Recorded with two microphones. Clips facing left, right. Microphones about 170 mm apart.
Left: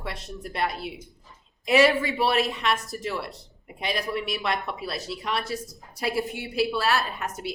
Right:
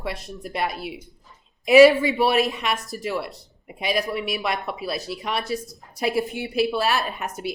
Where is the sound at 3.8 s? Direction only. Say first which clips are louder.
Right 4 dB; 10° right (ahead or behind).